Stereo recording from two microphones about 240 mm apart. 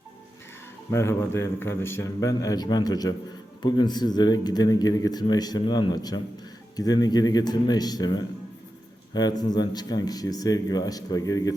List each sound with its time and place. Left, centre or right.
0.9 s speech: centre